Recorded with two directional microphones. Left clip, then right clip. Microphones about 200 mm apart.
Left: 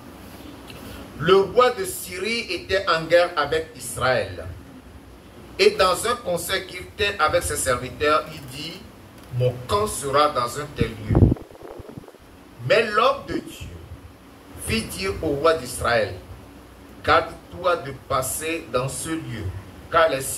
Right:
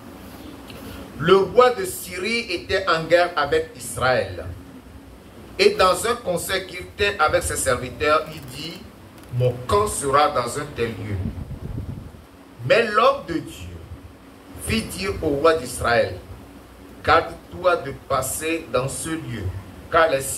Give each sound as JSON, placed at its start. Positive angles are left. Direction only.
{"t": 1.2, "sound": "a man's voice", "side_deg": -25}
{"t": 5.6, "sound": "a man's voice", "side_deg": -25}
{"t": 12.6, "sound": "a man's voice", "side_deg": -25}
{"t": 14.7, "sound": "a man's voice", "side_deg": -25}